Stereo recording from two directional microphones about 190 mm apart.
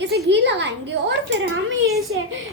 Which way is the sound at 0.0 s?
65° right (ahead or behind).